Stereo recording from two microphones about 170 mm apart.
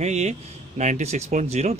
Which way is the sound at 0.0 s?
40° right (ahead or behind).